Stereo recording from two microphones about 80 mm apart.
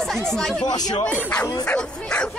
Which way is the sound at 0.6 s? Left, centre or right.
Left.